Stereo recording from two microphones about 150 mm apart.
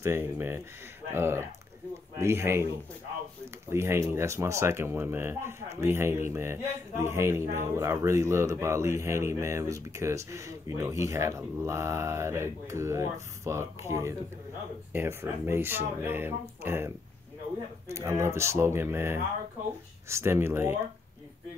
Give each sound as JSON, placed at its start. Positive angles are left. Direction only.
{"t": 0.0, "sound": "speech", "side_deg": -15}
{"t": 3.7, "sound": "speech", "side_deg": -15}